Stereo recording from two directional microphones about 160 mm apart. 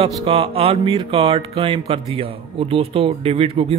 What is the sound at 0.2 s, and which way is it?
Speech, 35° right (ahead or behind).